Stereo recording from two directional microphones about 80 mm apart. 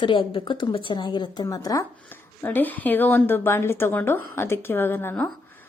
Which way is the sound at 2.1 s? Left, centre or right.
Left.